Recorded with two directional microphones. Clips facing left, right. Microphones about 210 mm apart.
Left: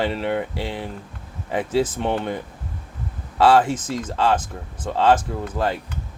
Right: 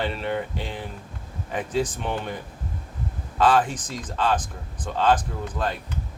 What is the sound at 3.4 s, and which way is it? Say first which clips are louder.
Speech: left 4 dB; 25° left (ahead or behind).